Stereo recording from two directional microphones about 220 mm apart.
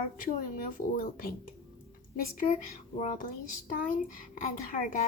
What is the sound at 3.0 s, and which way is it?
Speech, 35° left (ahead or behind).